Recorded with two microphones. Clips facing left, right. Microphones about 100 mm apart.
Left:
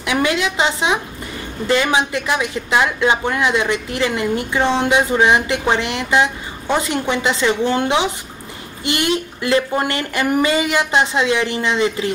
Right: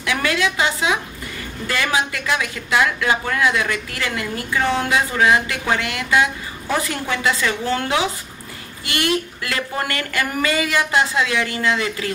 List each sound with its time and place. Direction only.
0.0 s speech: 25° left (ahead or behind)